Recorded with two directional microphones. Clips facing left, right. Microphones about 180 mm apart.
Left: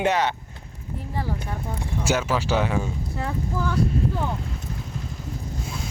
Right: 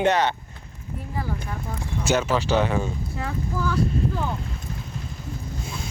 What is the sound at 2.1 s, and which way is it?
Speech, 10° left (ahead or behind).